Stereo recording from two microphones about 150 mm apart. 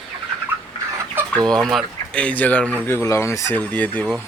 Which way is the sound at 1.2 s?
15° right (ahead or behind).